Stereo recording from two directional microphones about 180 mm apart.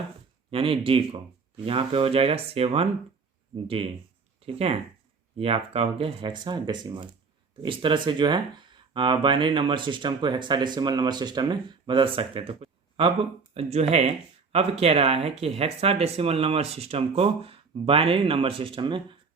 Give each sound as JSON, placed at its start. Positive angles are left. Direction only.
{"t": 0.5, "sound": "speech", "side_deg": -30}
{"t": 4.4, "sound": "speech", "side_deg": -35}